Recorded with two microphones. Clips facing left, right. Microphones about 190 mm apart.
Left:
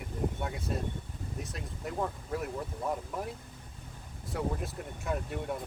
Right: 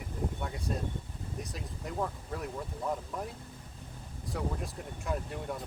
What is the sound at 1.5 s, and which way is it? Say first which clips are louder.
Speech: left 1 dB; centre (ahead or behind).